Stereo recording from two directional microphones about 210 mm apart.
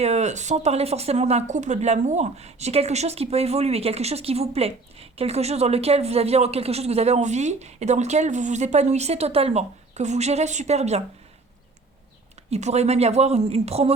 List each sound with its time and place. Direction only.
0.0 s speech: 30° right (ahead or behind)
12.5 s speech: 30° right (ahead or behind)